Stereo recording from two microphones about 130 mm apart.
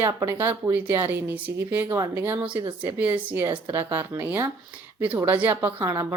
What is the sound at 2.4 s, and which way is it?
Speech, 40° right (ahead or behind).